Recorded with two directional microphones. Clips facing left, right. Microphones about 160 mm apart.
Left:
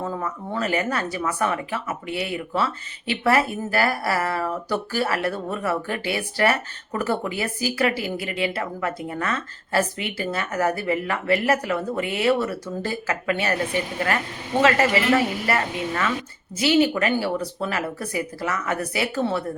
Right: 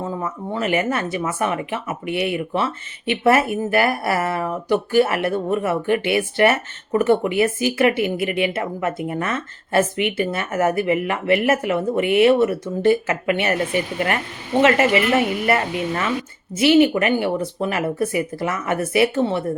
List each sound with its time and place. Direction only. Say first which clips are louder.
0.0 s speech: right 2 dB; 20° right (ahead or behind)